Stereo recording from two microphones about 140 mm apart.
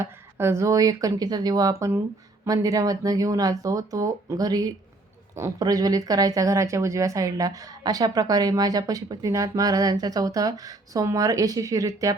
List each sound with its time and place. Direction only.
0.0 s speech: 20° right (ahead or behind)